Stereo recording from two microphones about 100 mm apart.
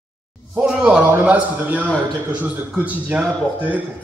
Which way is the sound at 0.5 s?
10° right (ahead or behind).